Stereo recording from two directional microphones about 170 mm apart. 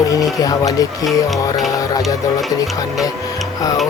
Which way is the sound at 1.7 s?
20° left (ahead or behind).